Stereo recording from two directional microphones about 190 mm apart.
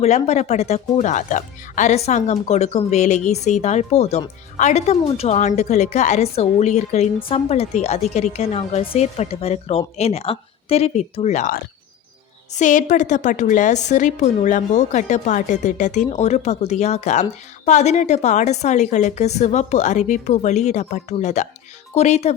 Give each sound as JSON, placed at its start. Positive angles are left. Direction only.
{"t": 0.0, "sound": "a woman's voice", "side_deg": 35}